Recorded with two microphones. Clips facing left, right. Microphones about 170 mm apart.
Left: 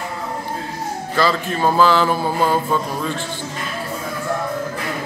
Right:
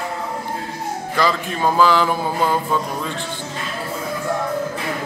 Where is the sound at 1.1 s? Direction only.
15° right (ahead or behind).